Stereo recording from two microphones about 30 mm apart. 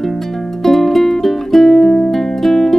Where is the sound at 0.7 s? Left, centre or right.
Centre.